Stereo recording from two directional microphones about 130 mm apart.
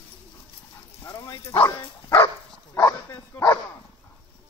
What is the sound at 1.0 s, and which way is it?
Dog, 20° left (ahead or behind).